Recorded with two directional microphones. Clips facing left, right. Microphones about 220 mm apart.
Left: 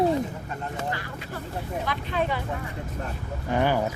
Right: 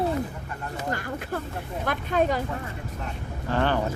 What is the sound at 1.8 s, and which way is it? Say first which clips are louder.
Speech: right 6 dB; 45° right (ahead or behind).